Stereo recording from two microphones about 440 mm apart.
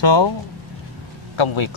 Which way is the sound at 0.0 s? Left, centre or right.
Left.